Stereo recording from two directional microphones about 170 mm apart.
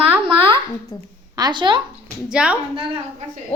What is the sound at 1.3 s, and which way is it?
Speech, 25° right (ahead or behind).